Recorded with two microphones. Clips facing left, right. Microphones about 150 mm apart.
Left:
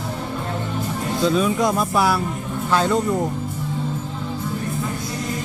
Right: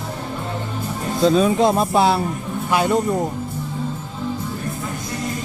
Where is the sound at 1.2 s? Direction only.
35° right (ahead or behind); by 3.0 s 15° right (ahead or behind).